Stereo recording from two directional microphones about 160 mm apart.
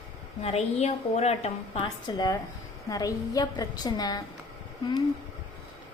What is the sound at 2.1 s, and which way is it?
A woman's voice, 25° left (ahead or behind).